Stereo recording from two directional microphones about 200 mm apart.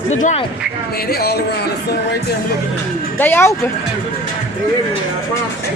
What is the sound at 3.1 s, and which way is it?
Speech, 10° left (ahead or behind).